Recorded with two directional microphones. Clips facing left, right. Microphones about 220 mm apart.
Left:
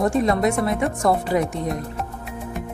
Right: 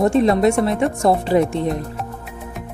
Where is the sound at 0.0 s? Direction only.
25° right (ahead or behind).